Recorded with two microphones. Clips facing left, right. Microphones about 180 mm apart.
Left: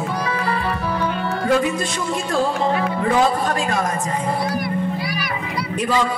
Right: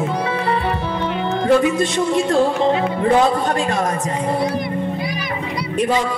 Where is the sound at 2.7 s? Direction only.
25° right (ahead or behind).